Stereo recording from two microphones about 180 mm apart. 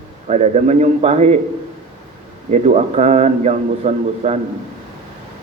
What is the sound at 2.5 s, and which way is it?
A man's voice, 40° right (ahead or behind).